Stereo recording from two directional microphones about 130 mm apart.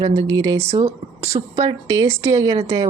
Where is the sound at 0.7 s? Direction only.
55° right (ahead or behind).